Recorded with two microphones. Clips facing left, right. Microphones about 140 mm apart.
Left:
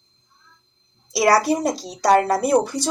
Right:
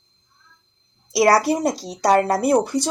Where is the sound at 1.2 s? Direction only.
25° right (ahead or behind).